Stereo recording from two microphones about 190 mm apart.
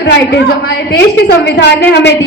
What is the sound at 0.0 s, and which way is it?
A woman's voice, 55° left (ahead or behind).